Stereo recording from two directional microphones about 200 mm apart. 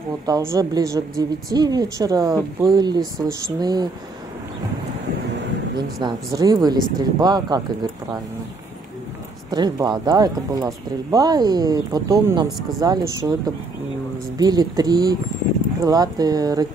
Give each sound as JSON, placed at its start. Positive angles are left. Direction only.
{"t": 0.3, "sound": "a woman's voice", "side_deg": -15}
{"t": 5.8, "sound": "speech", "side_deg": -20}
{"t": 9.5, "sound": "a woman's voice", "side_deg": -20}
{"t": 14.4, "sound": "speech", "side_deg": -20}